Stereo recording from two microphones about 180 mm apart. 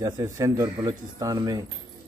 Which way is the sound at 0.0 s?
20° right (ahead or behind).